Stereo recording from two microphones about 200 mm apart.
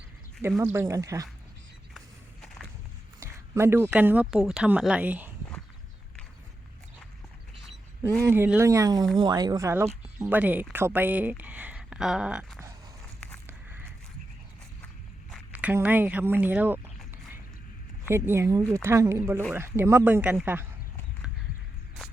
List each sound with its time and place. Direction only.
0.5 s speech: 10° right (ahead or behind)
3.2 s speech: 15° right (ahead or behind)
8.2 s speech: 10° right (ahead or behind)
13.5 s biting: 10° right (ahead or behind)
15.3 s speech: 5° right (ahead or behind)
18.1 s speech: 15° right (ahead or behind)